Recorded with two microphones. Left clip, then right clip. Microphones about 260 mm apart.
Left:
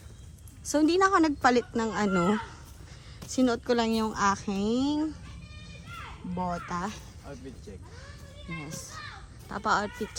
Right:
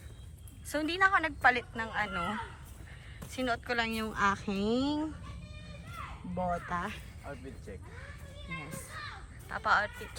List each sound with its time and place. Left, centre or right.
0.7 s a woman's voice: centre
3.2 s a woman's voice: centre
6.3 s a woman's voice: centre
8.4 s a child's voice: centre
9.5 s a woman's voice: centre